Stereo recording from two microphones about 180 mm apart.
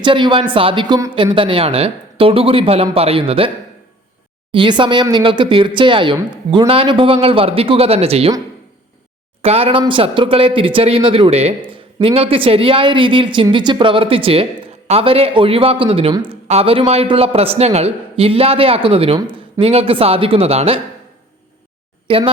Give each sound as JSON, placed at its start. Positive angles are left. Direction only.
{"t": 0.0, "sound": "speech", "side_deg": -25}
{"t": 4.5, "sound": "speech", "side_deg": -25}
{"t": 9.4, "sound": "speech", "side_deg": -35}
{"t": 22.0, "sound": "speech", "side_deg": -30}